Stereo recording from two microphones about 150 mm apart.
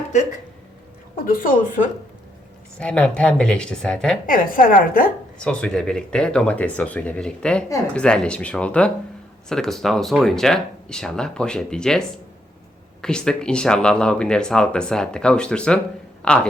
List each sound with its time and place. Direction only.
1.2 s a woman's voice: 65° left (ahead or behind)
2.7 s speech: 5° left (ahead or behind)
4.3 s a woman's voice: 65° left (ahead or behind)
5.4 s a woman's voice: 5° left (ahead or behind)